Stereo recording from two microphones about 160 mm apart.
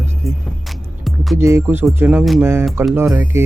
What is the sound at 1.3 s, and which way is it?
Speech, 15° right (ahead or behind).